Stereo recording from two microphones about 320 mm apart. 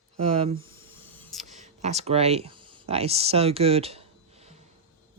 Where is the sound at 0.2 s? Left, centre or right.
Centre.